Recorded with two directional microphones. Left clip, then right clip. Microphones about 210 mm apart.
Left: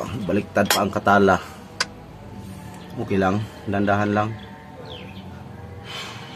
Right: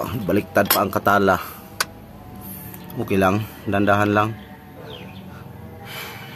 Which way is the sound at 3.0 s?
40° right (ahead or behind).